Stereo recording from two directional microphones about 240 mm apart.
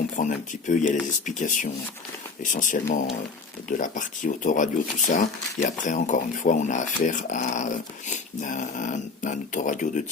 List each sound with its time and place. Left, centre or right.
0.2 s speech: left